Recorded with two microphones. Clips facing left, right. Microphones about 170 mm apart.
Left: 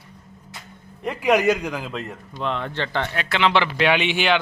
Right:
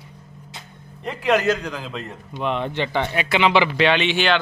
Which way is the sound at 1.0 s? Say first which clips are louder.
Left 1 dB; 10° left (ahead or behind).